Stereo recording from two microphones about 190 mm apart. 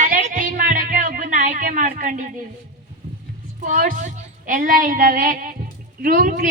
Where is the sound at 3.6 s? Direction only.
40° right (ahead or behind).